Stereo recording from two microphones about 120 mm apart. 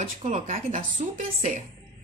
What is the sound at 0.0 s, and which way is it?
Speech, 80° right.